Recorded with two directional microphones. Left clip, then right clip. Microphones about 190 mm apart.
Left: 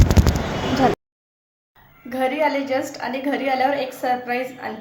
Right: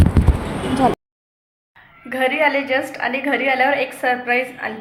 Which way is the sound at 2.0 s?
Centre (ahead or behind).